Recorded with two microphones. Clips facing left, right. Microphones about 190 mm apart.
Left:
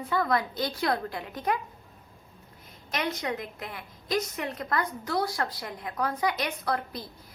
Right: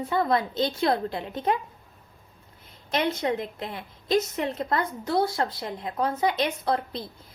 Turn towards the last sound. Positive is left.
turn(degrees=-25)  # may be behind; listen again after turning